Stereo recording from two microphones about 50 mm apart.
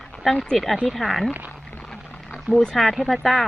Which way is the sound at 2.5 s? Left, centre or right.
Centre.